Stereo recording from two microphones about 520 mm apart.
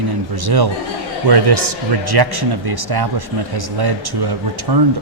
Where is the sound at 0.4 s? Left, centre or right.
Right.